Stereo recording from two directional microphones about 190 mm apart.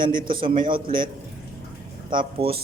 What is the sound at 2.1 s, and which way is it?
Speech, 30° right (ahead or behind).